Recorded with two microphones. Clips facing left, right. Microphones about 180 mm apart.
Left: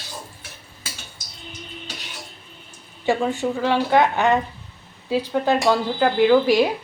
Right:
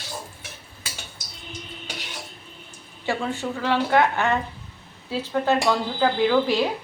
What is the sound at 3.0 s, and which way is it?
Speech, 15° left (ahead or behind).